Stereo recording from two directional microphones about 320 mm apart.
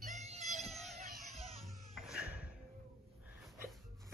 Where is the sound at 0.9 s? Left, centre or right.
Right.